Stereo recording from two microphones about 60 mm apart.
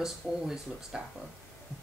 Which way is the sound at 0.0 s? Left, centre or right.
Centre.